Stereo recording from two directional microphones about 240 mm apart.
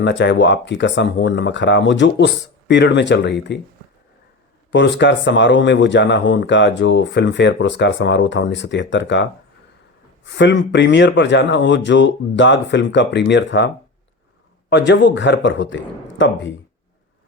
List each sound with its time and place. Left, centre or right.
0.0 s speech: left
4.7 s speech: left
10.3 s speech: left
14.7 s speech: left